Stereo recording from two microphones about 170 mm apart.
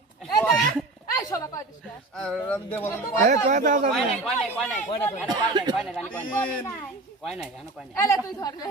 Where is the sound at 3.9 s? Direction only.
Centre (ahead or behind).